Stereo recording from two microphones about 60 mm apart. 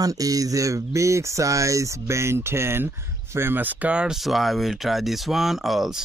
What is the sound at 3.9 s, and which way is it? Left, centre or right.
Speech, centre.